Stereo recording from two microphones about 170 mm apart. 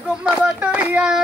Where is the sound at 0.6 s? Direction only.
5° right (ahead or behind).